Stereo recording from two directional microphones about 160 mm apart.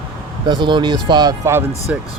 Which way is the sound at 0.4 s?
30° right (ahead or behind).